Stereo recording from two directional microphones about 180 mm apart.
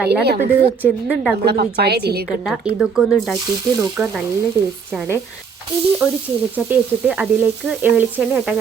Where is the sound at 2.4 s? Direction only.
5° right (ahead or behind).